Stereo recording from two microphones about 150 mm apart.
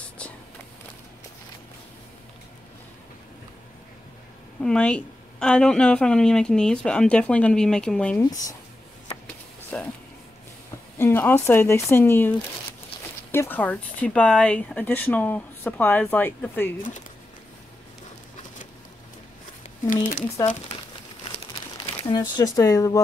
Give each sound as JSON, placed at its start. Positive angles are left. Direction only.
{"t": 4.6, "sound": "a woman's voice", "side_deg": 5}
{"t": 8.2, "sound": "speech", "side_deg": 20}
{"t": 9.7, "sound": "speech", "side_deg": 10}
{"t": 11.0, "sound": "a woman's voice", "side_deg": 15}
{"t": 19.9, "sound": "speech", "side_deg": 60}
{"t": 22.0, "sound": "speech", "side_deg": 30}